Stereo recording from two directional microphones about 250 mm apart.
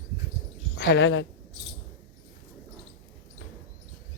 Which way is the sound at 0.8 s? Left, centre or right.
Left.